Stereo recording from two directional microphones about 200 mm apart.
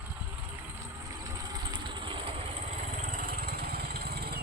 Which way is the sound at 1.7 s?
25° right (ahead or behind).